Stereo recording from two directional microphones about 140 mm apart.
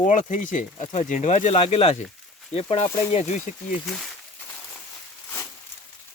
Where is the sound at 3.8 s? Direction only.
Centre (ahead or behind).